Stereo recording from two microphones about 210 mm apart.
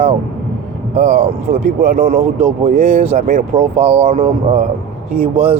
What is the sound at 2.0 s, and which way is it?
Speech, 30° right (ahead or behind).